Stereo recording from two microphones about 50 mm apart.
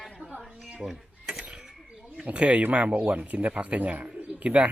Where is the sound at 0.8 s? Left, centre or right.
Centre.